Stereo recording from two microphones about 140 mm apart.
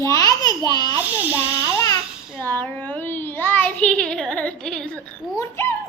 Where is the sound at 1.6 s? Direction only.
25° left (ahead or behind).